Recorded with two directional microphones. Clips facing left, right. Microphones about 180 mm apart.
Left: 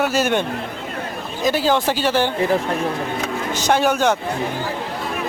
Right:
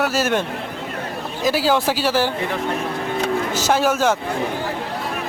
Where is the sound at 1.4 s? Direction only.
5° right (ahead or behind).